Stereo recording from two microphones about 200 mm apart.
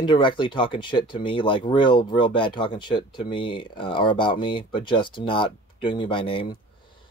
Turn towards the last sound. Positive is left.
turn(degrees=25)  # may be behind; listen again after turning